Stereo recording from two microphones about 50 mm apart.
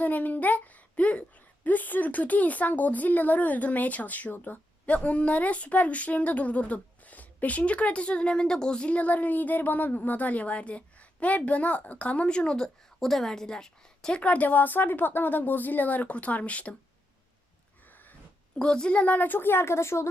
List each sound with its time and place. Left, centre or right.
0.0 s a woman's voice: left
4.9 s speech: left
14.2 s speech: left
18.6 s speech: centre; by 20.1 s left